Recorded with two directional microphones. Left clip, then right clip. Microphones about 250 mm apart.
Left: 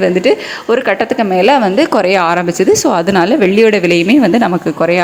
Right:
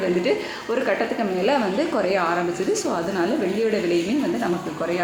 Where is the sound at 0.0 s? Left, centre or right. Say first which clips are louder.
Left 11 dB; left.